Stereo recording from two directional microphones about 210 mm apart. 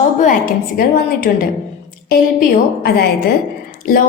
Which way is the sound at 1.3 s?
45° left (ahead or behind).